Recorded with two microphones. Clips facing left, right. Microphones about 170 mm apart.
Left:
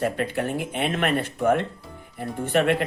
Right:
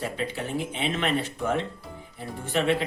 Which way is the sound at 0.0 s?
55° left (ahead or behind).